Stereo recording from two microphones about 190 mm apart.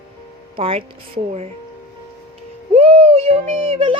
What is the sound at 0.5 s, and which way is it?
Speech, 30° right (ahead or behind).